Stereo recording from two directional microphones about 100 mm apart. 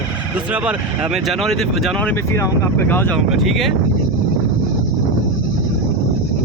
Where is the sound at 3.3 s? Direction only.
Centre (ahead or behind).